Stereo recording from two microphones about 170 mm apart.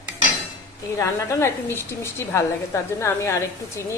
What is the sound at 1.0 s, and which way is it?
A woman's voice, 15° left (ahead or behind).